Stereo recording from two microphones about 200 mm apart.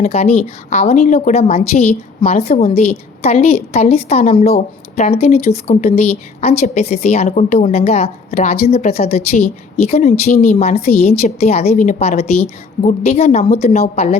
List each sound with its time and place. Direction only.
0.0 s a woman's voice: 30° left (ahead or behind)
4.4 s a woman's voice: 50° left (ahead or behind)
4.9 s a woman's voice: 30° left (ahead or behind)